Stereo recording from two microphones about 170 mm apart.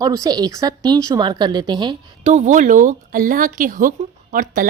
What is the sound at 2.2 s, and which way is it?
Speech, 45° right (ahead or behind).